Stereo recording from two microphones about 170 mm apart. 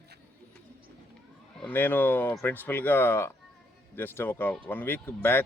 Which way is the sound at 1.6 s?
10° left (ahead or behind).